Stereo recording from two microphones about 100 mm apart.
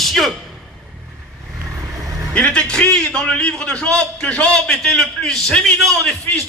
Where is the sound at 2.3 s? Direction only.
10° left (ahead or behind).